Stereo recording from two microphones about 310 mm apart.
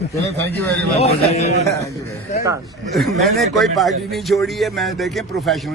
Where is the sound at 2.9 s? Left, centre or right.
Centre.